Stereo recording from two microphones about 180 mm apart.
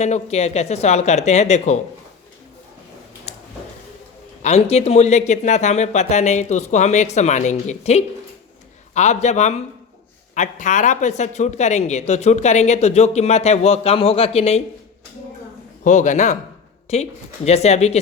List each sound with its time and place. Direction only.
0.0 s speech: 40° left (ahead or behind)
3.3 s a sound: 40° left (ahead or behind)
4.4 s speech: 35° left (ahead or behind)
15.8 s a man's voice: 45° left (ahead or behind)